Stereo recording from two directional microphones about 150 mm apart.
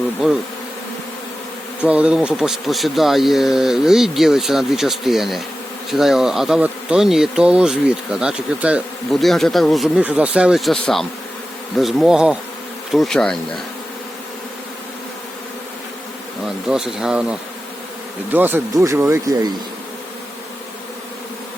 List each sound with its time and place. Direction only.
1.8 s speech: 10° right (ahead or behind)
16.6 s speech: 5° right (ahead or behind); by 19.5 s 20° right (ahead or behind)